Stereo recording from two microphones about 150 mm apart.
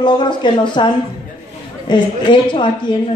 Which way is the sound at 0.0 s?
30° left (ahead or behind).